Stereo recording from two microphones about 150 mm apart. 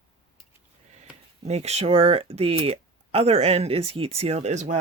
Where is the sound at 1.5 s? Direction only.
45° right (ahead or behind).